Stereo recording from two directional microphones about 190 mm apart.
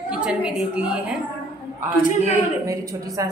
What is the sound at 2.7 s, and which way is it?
Speech, 15° right (ahead or behind).